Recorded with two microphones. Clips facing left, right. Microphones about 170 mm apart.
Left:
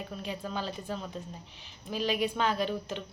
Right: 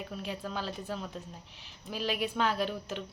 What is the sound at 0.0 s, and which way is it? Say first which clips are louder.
A woman's voice: left 1 dB; 5° right (ahead or behind).